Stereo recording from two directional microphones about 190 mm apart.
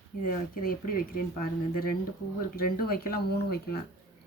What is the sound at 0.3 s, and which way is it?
Speech, 50° left (ahead or behind).